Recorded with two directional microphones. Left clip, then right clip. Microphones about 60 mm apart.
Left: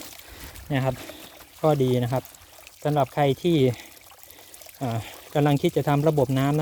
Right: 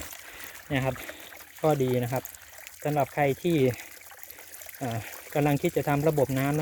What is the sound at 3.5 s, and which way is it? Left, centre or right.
Speech, left.